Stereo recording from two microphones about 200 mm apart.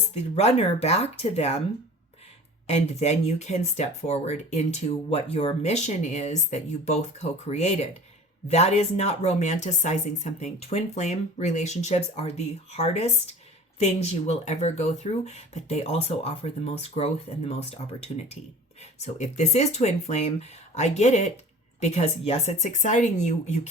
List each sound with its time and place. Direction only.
0.1 s speech: 30° left (ahead or behind)
2.6 s speech: 35° left (ahead or behind)
18.9 s speech: 35° left (ahead or behind)